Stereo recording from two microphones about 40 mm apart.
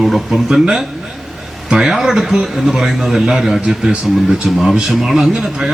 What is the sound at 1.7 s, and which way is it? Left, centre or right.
A man's voice, centre.